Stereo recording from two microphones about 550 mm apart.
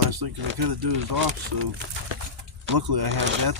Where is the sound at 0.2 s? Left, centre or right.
Right.